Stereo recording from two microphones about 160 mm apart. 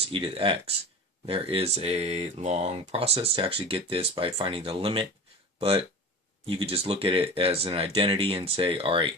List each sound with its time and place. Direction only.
0.1 s speech: 35° right (ahead or behind)